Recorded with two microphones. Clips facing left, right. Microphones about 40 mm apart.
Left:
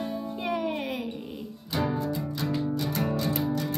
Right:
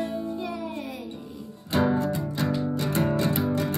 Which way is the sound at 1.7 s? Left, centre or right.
Right.